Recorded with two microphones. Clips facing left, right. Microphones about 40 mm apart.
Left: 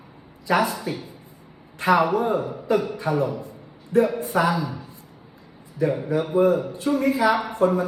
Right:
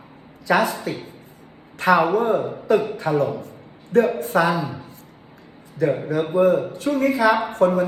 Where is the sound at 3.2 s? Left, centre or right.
Right.